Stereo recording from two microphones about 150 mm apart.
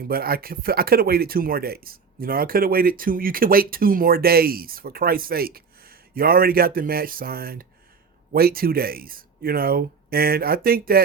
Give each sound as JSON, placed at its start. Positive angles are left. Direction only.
{"t": 0.0, "sound": "speech", "side_deg": -85}